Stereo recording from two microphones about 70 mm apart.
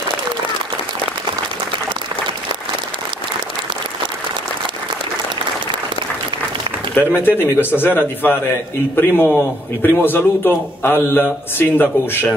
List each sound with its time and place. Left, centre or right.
7.2 s a man's voice: left